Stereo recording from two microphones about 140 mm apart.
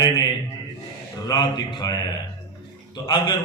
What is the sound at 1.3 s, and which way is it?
Speech, 30° left (ahead or behind).